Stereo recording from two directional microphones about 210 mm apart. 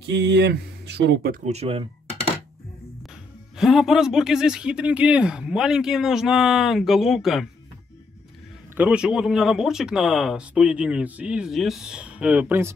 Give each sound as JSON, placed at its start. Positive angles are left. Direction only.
{"t": 0.0, "sound": "speech", "side_deg": -55}
{"t": 1.3, "sound": "speech", "side_deg": -30}
{"t": 3.5, "sound": "speech", "side_deg": 0}
{"t": 8.7, "sound": "speech", "side_deg": -5}